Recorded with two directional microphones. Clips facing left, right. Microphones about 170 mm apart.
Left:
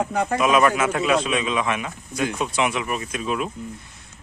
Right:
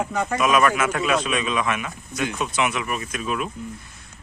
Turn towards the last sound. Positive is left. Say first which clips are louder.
# left 1 dB
turn(degrees=25)  # may be behind; listen again after turning